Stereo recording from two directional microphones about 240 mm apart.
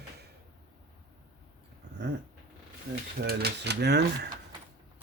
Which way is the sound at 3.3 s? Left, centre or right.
Right.